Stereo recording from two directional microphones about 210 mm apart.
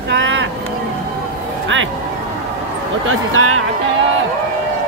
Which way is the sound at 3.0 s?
80° right.